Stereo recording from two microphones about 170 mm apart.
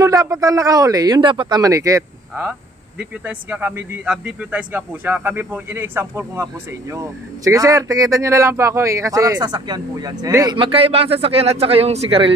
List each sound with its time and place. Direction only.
0.0 s speech: 20° right (ahead or behind)